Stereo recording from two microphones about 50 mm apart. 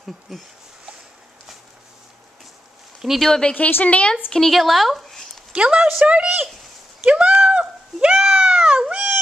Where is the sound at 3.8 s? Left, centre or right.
Left.